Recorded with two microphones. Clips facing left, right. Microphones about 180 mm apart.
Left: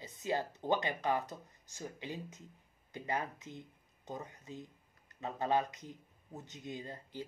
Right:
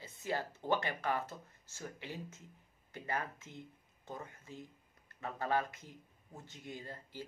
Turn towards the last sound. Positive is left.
turn(degrees=20)  # may be behind; listen again after turning